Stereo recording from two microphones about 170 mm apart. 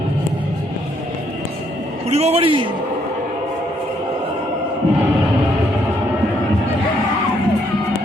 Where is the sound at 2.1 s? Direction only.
40° right (ahead or behind).